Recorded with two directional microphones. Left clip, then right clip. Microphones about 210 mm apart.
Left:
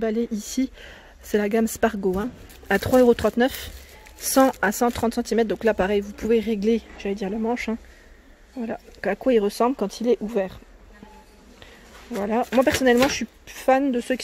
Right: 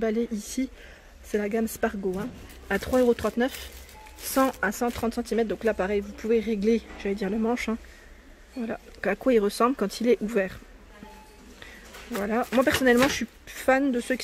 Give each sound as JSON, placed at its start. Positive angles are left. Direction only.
{"t": 0.0, "sound": "speech", "side_deg": 10}
{"t": 12.2, "sound": "speech", "side_deg": 10}